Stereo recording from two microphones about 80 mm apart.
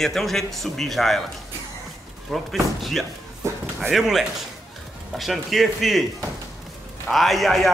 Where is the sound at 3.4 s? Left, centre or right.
Right.